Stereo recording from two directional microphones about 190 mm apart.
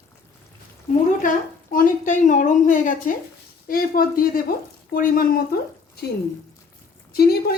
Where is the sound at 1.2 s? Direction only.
45° left (ahead or behind).